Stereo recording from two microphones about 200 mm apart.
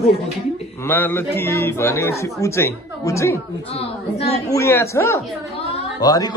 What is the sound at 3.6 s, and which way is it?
Speech, 30° left (ahead or behind).